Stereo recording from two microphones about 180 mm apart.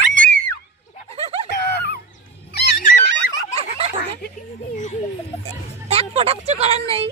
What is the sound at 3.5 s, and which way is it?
Snicker, 35° right (ahead or behind).